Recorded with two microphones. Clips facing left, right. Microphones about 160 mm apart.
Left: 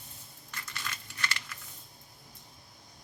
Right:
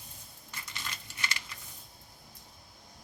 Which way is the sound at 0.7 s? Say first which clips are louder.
Left 2 dB; 15° right (ahead or behind).